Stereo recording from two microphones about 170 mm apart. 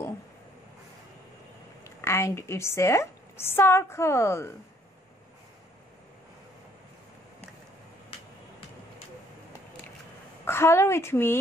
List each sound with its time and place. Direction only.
2.0 s a woman's voice: 15° left (ahead or behind)
10.4 s a woman's voice: 15° left (ahead or behind)